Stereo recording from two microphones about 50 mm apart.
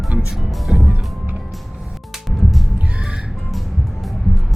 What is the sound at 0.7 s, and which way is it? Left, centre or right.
Music, centre.